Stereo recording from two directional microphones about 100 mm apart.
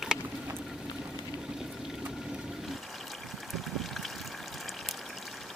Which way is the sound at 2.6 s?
Centre (ahead or behind).